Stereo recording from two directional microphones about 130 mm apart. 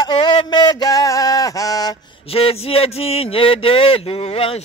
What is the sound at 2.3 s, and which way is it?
A man's voice, 45° left (ahead or behind).